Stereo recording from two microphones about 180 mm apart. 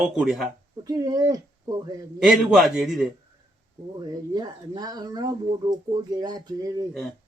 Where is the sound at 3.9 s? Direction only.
20° right (ahead or behind).